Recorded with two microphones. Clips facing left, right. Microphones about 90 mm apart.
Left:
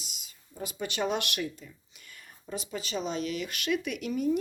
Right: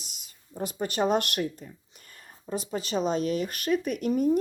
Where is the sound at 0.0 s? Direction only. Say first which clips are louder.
Left 1 dB; 50° right (ahead or behind).